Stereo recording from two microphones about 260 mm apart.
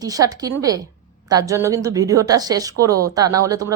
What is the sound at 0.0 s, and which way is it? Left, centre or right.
A woman's voice, centre.